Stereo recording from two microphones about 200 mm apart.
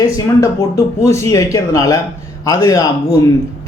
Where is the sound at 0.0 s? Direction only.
15° left (ahead or behind).